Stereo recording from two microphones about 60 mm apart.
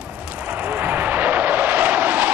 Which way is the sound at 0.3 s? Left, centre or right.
Right.